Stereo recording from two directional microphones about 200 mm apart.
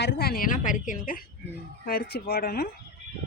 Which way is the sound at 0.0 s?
55° left (ahead or behind).